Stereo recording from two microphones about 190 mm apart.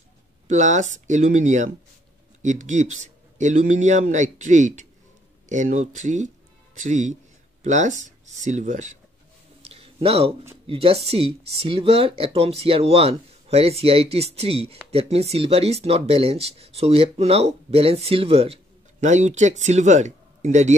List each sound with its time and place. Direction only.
0.5 s speech: 40° right (ahead or behind)
9.6 s a sound: 30° right (ahead or behind)
10.7 s speech: 30° right (ahead or behind)